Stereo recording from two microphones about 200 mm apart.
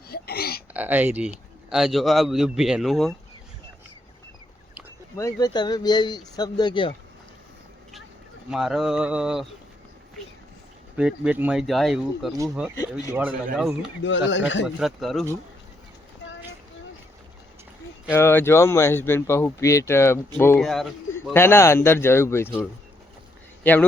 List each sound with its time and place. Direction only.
0.1 s a sound: 50° left (ahead or behind)
0.7 s speech: 10° right (ahead or behind)
5.1 s speech: 15° left (ahead or behind)
8.4 s speech: centre (ahead or behind)
10.9 s speech: 5° right (ahead or behind)
12.7 s speech: 15° left (ahead or behind)
13.1 s speech: 5° right (ahead or behind)
14.0 s a man's voice: 65° left (ahead or behind)
14.8 s speech: centre (ahead or behind)
16.2 s a sound: 65° left (ahead or behind)
18.1 s speech: 10° left (ahead or behind)
20.6 s speech: centre (ahead or behind)
21.3 s speech: 10° left (ahead or behind)